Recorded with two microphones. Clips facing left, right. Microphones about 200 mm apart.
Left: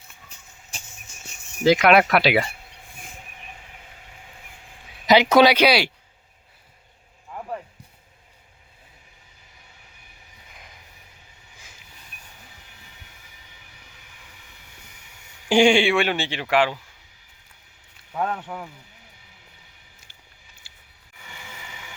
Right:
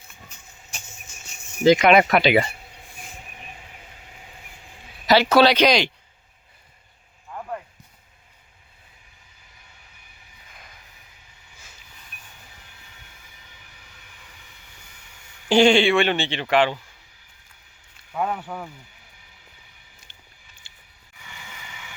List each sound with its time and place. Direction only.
0.7 s a sound: 35° left (ahead or behind)
1.6 s speech: 5° left (ahead or behind)
5.0 s speech: 15° left (ahead or behind)
15.4 s speech: 10° left (ahead or behind)
18.2 s speech: 10° right (ahead or behind)
20.7 s a sound: 5° left (ahead or behind)